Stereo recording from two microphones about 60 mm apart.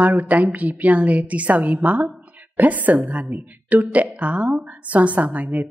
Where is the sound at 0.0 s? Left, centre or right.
Right.